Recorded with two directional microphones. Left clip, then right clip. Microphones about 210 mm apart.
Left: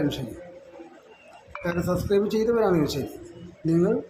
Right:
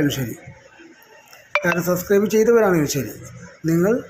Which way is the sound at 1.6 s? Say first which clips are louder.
Right 4 dB; 15° right (ahead or behind).